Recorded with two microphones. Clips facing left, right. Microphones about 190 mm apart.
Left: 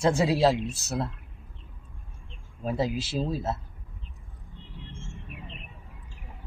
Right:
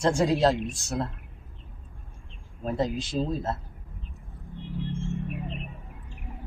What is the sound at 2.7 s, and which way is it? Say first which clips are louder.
Speech: even; 5° left (ahead or behind).